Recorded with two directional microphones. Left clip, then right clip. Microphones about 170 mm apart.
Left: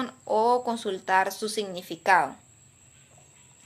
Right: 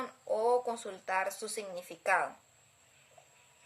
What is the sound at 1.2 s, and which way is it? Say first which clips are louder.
Speech: left 7 dB; 45° left (ahead or behind).